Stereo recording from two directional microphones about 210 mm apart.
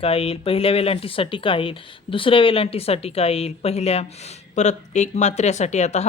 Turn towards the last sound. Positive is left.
turn(degrees=35)  # may be behind; listen again after turning